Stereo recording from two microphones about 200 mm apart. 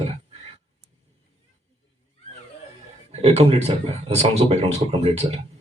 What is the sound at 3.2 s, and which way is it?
A man's voice, 30° right (ahead or behind).